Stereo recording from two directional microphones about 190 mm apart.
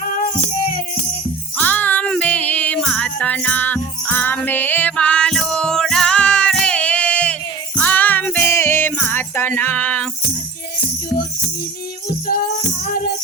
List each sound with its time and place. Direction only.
0.0 s music: 45° left (ahead or behind)
1.5 s music: 10° left (ahead or behind)